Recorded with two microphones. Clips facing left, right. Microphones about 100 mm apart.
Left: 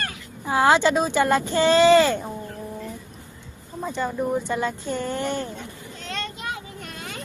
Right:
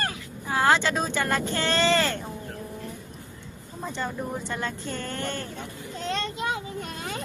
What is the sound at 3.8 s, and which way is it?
Speech, 5° left (ahead or behind).